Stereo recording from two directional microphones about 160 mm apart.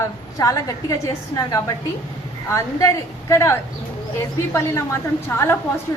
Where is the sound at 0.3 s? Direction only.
20° left (ahead or behind).